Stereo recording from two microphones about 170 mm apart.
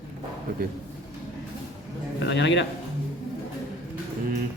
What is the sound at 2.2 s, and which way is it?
Speech, 90° left.